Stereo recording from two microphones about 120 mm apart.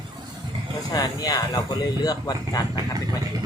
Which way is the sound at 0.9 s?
30° left (ahead or behind).